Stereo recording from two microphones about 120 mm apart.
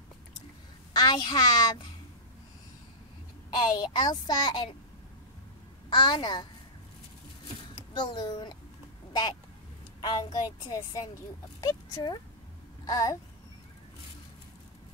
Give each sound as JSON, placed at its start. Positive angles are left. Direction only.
{"t": 0.9, "sound": "a child's voice", "side_deg": 35}
{"t": 3.6, "sound": "a child's voice", "side_deg": 35}
{"t": 5.9, "sound": "a child's voice", "side_deg": 40}
{"t": 7.9, "sound": "a child's voice", "side_deg": 40}